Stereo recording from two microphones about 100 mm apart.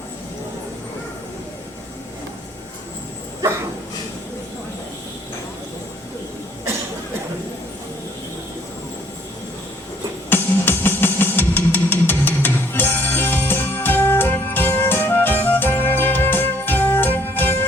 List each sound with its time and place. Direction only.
10.2 s music: 20° left (ahead or behind)